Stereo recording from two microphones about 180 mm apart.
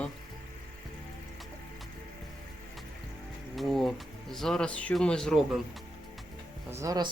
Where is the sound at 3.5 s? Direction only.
Centre (ahead or behind).